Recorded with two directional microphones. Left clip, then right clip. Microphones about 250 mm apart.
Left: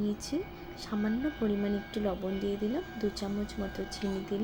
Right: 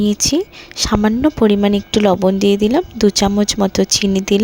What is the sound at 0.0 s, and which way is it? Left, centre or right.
A woman's voice, right.